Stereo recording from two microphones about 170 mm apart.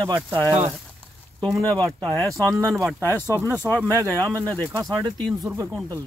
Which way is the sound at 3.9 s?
15° right (ahead or behind).